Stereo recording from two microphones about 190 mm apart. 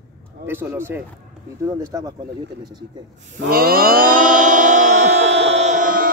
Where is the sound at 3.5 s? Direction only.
50° right (ahead or behind).